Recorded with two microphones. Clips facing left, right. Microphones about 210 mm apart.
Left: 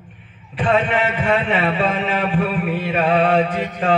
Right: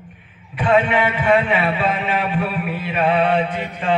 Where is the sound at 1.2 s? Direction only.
40° left (ahead or behind).